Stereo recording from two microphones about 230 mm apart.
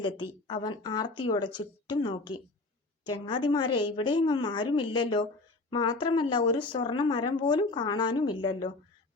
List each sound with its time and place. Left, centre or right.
0.0 s speech: centre